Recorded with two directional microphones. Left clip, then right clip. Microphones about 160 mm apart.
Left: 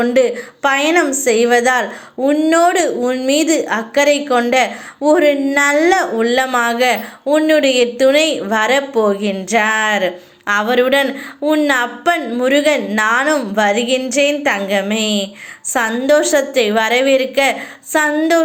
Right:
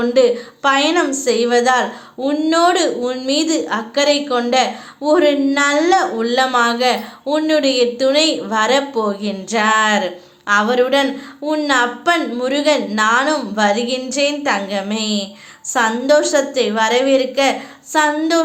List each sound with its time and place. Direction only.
0.0 s a woman's voice: 20° left (ahead or behind)